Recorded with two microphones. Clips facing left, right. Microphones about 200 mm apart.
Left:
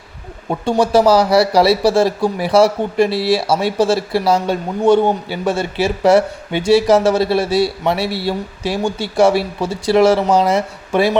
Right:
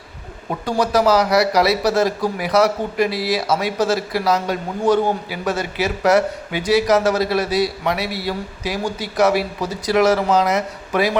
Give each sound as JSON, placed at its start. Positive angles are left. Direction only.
{"t": 0.6, "sound": "a man's voice", "side_deg": 30}